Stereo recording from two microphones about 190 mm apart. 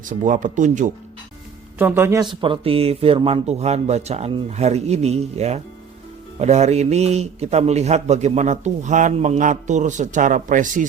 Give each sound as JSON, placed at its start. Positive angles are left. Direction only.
{"t": 0.0, "sound": "speech", "side_deg": -40}
{"t": 1.8, "sound": "a man's voice", "side_deg": -10}
{"t": 2.2, "sound": "a man's voice", "side_deg": -25}